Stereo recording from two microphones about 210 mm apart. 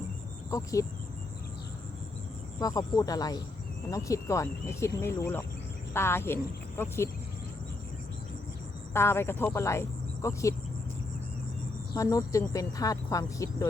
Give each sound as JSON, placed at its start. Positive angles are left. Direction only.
{"t": 0.5, "sound": "speech", "side_deg": 15}
{"t": 2.6, "sound": "speech", "side_deg": 15}
{"t": 8.9, "sound": "speech", "side_deg": 10}
{"t": 11.9, "sound": "speech", "side_deg": 15}